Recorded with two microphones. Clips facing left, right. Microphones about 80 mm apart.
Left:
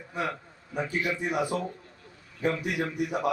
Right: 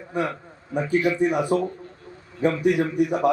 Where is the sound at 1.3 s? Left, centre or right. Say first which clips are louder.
Right 6 dB; right.